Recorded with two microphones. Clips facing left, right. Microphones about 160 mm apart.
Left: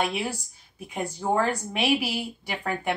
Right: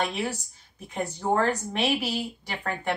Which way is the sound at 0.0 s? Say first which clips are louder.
Left 1 dB; 10° left (ahead or behind).